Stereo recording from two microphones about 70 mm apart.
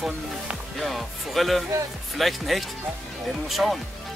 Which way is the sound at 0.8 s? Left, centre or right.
Centre.